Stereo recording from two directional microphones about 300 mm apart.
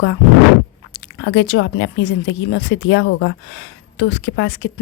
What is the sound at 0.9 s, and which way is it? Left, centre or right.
Speech, left.